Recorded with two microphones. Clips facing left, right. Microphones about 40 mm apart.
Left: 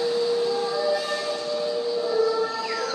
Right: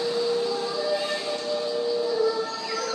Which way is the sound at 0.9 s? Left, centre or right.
Centre.